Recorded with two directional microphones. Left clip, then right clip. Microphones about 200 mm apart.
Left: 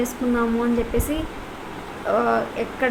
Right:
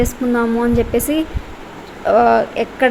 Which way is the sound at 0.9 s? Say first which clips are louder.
Right 7 dB; 30° right (ahead or behind).